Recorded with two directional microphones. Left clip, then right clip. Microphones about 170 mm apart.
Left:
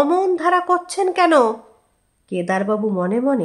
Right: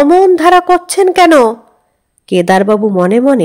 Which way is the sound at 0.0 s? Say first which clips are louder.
Right 10 dB; 35° right (ahead or behind).